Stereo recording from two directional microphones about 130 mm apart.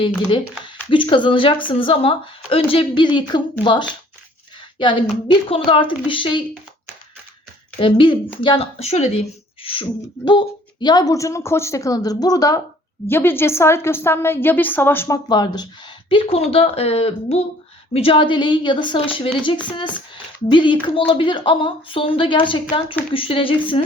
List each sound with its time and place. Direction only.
0.9 s speech: 40° left (ahead or behind)
7.8 s speech: 40° left (ahead or behind)
9.6 s speech: 40° left (ahead or behind)
13.1 s speech: 15° left (ahead or behind)
15.3 s speech: 35° left (ahead or behind)